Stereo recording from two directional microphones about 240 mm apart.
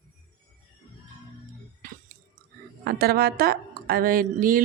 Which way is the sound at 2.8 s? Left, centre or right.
Right.